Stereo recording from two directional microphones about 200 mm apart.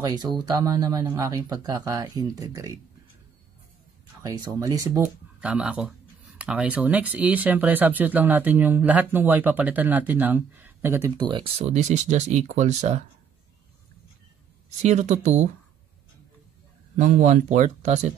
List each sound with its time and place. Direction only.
0.0 s speech: 20° right (ahead or behind)
4.2 s speech: 20° right (ahead or behind)
5.4 s speech: 5° right (ahead or behind); by 13.0 s 35° right (ahead or behind)
14.8 s speech: 35° right (ahead or behind)
16.9 s speech: 40° right (ahead or behind)